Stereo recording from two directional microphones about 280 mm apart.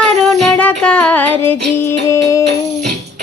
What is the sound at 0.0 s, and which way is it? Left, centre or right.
Music, centre.